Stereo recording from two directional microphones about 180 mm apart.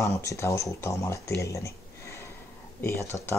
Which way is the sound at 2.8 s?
15° left (ahead or behind).